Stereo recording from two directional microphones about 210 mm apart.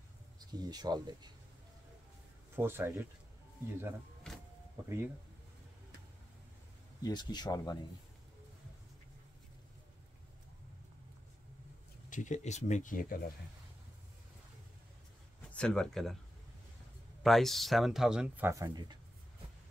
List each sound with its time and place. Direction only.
0.4 s speech: 20° right (ahead or behind)
2.5 s speech: 10° right (ahead or behind)
4.2 s power windows: 5° left (ahead or behind)
4.8 s speech: 15° right (ahead or behind)
7.0 s speech: 20° left (ahead or behind)
12.1 s speech: 35° left (ahead or behind)
15.5 s speech: 5° left (ahead or behind)
17.2 s speech: centre (ahead or behind); by 18.9 s 20° right (ahead or behind)